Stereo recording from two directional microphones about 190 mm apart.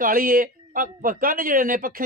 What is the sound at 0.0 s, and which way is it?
Speech, 50° right (ahead or behind).